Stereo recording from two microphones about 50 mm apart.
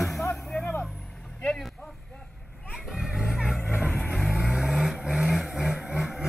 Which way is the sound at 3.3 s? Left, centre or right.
Centre.